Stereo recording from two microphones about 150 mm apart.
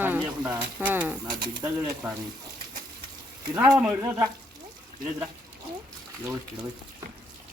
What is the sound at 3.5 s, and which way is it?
Speech, 10° right (ahead or behind).